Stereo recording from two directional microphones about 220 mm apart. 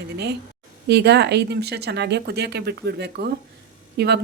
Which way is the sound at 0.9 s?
50° right (ahead or behind).